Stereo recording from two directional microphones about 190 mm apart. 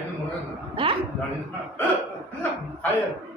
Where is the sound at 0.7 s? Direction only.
30° right (ahead or behind).